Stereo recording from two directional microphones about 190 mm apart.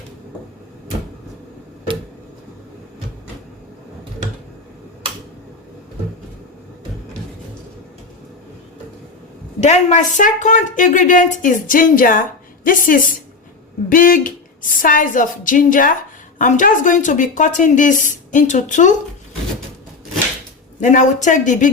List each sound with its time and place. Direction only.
9.6 s speech: 40° left (ahead or behind)
20.8 s speech: 40° left (ahead or behind)